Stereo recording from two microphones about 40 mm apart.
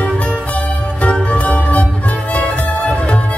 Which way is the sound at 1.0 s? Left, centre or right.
Left.